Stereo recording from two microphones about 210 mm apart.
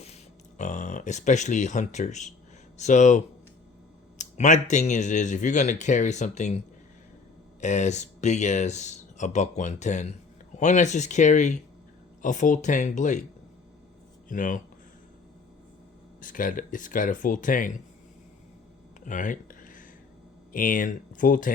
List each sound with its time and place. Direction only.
0.0 s speech: 35° left (ahead or behind)
7.6 s speech: 35° left (ahead or behind)
14.3 s speech: 40° left (ahead or behind)
16.2 s speech: 40° left (ahead or behind)
19.0 s a sound: 40° left (ahead or behind)
20.5 s speech: 40° left (ahead or behind)